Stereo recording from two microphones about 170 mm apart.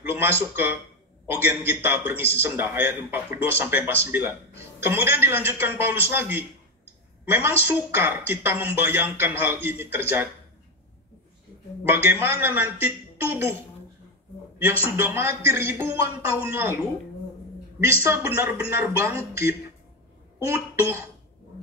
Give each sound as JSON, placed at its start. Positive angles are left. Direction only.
{"t": 0.1, "sound": "a man's voice", "side_deg": -15}
{"t": 11.8, "sound": "a man's voice", "side_deg": -15}
{"t": 14.6, "sound": "a man's voice", "side_deg": -15}